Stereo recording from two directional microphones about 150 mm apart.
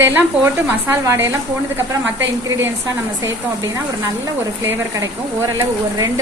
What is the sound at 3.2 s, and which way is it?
Speech, 20° right (ahead or behind).